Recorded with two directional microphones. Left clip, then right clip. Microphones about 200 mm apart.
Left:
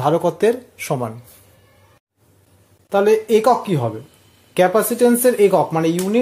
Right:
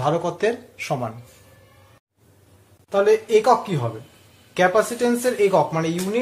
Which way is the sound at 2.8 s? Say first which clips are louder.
Left 3 dB; 55° left (ahead or behind).